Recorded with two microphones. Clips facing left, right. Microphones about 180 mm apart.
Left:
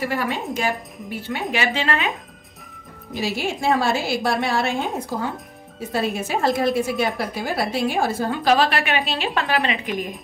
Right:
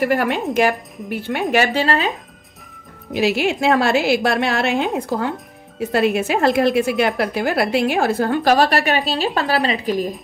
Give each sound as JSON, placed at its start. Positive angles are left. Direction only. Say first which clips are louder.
{"t": 0.6, "sound": "a woman's voice", "louder": "right 7 dB", "side_deg": -70}
{"t": 1.5, "sound": "a woman's voice", "louder": "right 6 dB", "side_deg": -40}
{"t": 3.1, "sound": "a woman's voice", "louder": "right 7 dB", "side_deg": -75}
{"t": 8.5, "sound": "a woman's voice", "louder": "right 4 dB", "side_deg": -40}